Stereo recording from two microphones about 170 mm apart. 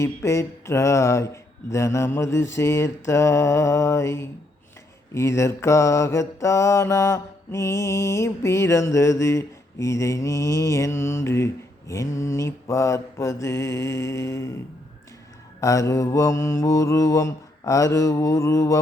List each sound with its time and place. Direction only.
0.0 s mantra: 15° left (ahead or behind)
15.6 s mantra: 20° left (ahead or behind)